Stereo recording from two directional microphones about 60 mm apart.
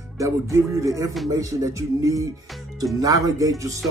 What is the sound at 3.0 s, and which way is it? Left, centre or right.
Music, right.